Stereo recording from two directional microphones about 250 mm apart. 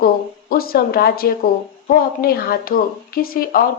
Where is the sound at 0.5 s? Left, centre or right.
Left.